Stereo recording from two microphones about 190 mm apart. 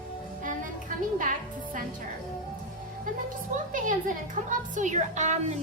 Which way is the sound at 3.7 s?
45° right (ahead or behind).